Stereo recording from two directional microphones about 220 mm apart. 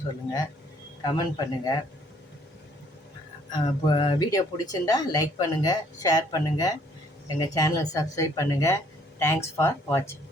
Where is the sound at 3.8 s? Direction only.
20° left (ahead or behind).